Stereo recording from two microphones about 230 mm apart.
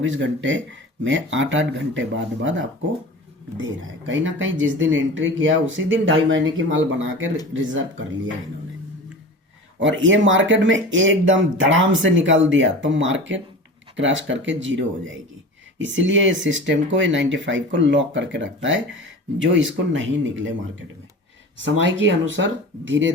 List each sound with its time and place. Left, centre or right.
0.0 s speech: right
9.8 s speech: right
21.6 s speech: right